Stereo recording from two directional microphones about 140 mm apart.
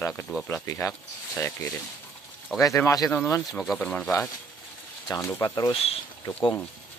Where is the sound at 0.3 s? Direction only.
20° left (ahead or behind).